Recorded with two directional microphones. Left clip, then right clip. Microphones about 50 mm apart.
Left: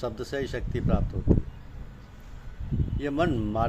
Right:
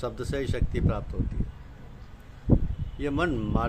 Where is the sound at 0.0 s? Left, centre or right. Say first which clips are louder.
Even; right.